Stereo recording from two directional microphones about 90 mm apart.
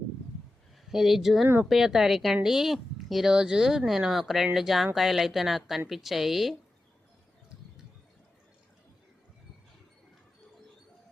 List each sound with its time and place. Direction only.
0.9 s speech: centre (ahead or behind)